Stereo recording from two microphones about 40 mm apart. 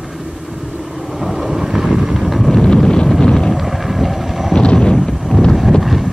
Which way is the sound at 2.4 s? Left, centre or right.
Centre.